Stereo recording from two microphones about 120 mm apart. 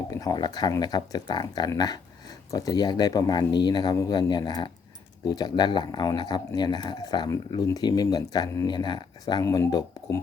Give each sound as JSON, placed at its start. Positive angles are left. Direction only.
{"t": 0.1, "sound": "speech", "side_deg": 30}